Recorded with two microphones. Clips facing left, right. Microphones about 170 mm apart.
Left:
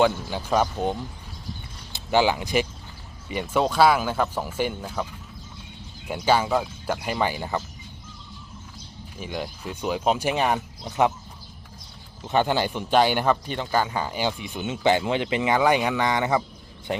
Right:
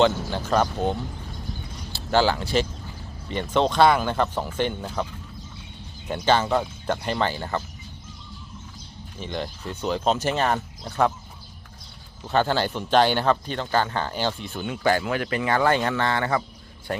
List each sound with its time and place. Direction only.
0.0 s speech: 10° left (ahead or behind)
6.1 s speech: 10° left (ahead or behind)
9.1 s speech: 10° left (ahead or behind)
12.3 s speech: 15° left (ahead or behind)